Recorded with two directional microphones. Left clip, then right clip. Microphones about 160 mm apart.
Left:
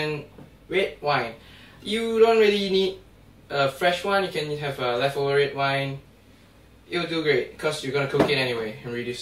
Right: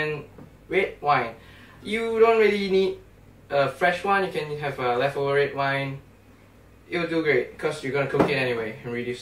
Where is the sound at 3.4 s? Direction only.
5° right (ahead or behind).